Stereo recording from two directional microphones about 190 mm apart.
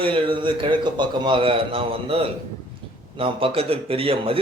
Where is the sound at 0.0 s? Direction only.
25° right (ahead or behind).